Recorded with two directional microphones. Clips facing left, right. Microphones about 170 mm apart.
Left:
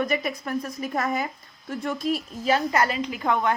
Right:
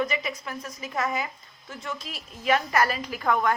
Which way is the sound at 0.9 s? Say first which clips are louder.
Left 1 dB; 40° left (ahead or behind).